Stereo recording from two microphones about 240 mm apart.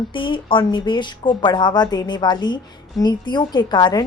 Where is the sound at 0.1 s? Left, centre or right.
Left.